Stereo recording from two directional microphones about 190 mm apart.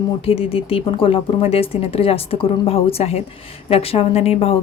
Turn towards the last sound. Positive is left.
turn(degrees=30)  # may be behind; listen again after turning